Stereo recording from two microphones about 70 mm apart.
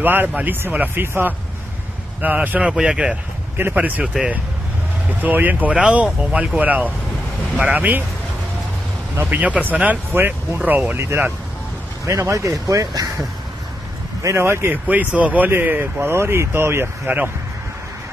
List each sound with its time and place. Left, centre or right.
0.0 s speech: right
2.2 s speech: right
2.7 s speech: centre
3.5 s speech: right
5.2 s speech: right
9.1 s speech: right
9.4 s speech: right
10.1 s speech: right
10.6 s speech: right
11.0 s speech: right
14.2 s speech: right
14.7 s speech: right